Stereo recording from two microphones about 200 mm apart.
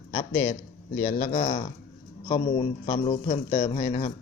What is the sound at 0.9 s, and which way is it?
Speech, 45° left (ahead or behind).